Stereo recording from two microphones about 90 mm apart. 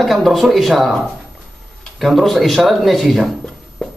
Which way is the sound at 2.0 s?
Centre (ahead or behind).